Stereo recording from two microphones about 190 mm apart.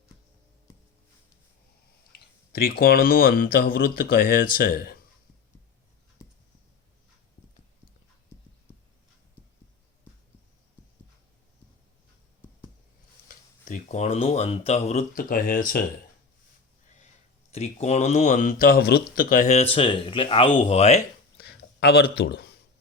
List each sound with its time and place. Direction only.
2.1 s speech: 50° left (ahead or behind)
13.2 s speech: 40° left (ahead or behind)
17.5 s speech: 35° left (ahead or behind)
18.6 s speech: 50° left (ahead or behind); by 21.0 s 35° left (ahead or behind)
21.3 s a sound: 60° left (ahead or behind)